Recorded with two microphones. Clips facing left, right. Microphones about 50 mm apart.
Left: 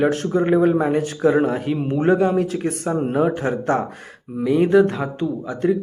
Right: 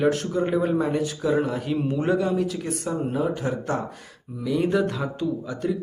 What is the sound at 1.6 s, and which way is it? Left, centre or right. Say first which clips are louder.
A man's voice: left 5 dB; left.